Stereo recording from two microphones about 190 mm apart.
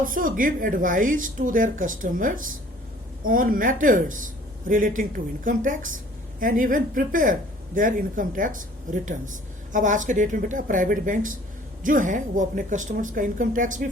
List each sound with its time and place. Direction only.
0.0 s speech: 45° right (ahead or behind)